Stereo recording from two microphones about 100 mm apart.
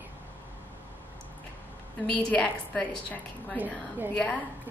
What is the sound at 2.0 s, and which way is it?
A woman's voice, 10° left (ahead or behind).